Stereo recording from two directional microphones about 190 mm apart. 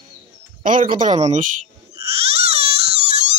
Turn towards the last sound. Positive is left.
turn(degrees=-35)  # may be behind; listen again after turning